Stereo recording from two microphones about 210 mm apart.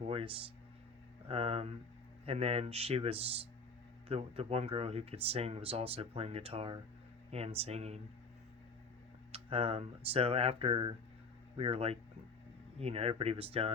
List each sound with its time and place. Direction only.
0.1 s speech: 25° right (ahead or behind)
9.3 s speech: 25° right (ahead or behind)